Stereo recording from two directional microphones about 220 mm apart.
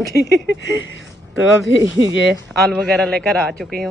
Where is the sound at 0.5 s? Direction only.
60° left (ahead or behind).